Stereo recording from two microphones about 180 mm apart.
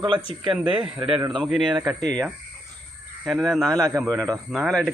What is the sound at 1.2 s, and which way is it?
Speech, 25° right (ahead or behind).